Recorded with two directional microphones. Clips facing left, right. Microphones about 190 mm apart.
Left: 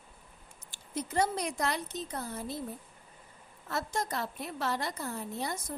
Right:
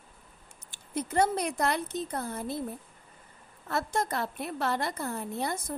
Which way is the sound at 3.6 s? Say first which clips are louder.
Right 4 dB; 55° right (ahead or behind).